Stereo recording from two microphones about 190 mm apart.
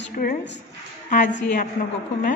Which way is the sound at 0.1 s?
50° left (ahead or behind).